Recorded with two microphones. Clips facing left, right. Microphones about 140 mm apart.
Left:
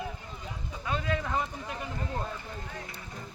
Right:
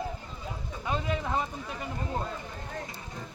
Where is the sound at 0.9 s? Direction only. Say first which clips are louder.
Right 1 dB; 20° right (ahead or behind).